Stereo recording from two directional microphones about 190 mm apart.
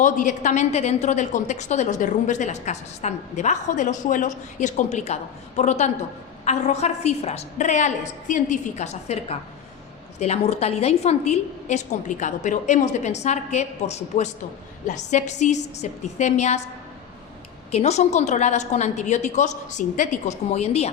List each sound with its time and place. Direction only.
0.0 s a woman's voice: 40° left (ahead or behind)
17.7 s a woman's voice: 35° left (ahead or behind)